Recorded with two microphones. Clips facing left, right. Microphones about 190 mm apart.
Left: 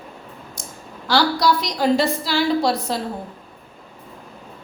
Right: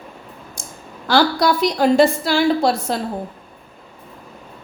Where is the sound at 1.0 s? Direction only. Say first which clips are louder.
Right 2 dB; 50° right (ahead or behind).